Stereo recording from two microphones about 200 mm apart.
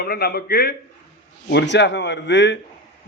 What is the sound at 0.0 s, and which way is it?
A man's voice, 50° left (ahead or behind).